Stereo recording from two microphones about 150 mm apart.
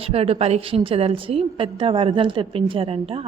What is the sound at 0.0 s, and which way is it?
A woman's voice, 40° right (ahead or behind).